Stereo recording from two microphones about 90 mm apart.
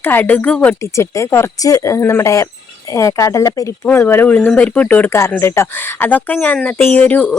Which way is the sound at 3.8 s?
25° left (ahead or behind).